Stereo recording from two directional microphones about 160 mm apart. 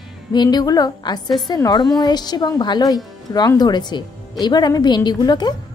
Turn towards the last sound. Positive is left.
turn(degrees=25)  # may be behind; listen again after turning